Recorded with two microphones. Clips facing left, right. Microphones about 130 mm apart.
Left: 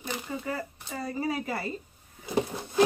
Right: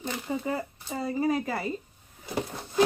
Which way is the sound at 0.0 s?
20° right (ahead or behind).